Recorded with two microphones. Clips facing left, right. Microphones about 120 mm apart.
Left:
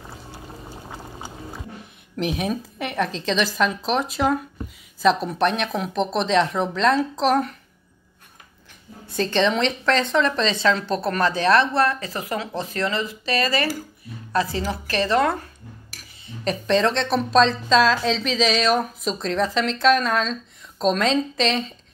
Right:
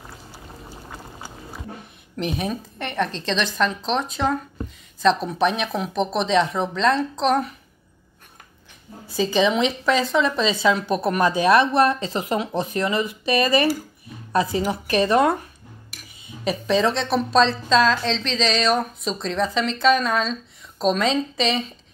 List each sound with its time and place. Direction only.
2.1 s a woman's voice: centre (ahead or behind)
9.0 s a woman's voice: 5° right (ahead or behind)
16.3 s a woman's voice: 5° right (ahead or behind)